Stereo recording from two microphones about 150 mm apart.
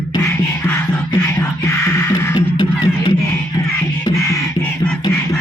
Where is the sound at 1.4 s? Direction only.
20° left (ahead or behind).